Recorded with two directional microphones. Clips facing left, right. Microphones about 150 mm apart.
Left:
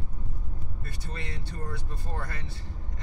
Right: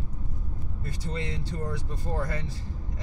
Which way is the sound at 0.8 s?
20° right (ahead or behind).